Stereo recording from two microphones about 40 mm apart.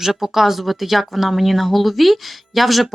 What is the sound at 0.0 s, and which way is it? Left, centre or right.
Speech, centre.